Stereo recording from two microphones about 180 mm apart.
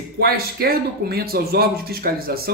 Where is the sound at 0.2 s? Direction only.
60° right (ahead or behind).